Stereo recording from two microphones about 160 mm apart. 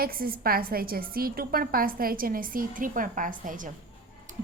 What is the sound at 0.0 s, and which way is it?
A woman's voice, 65° right (ahead or behind).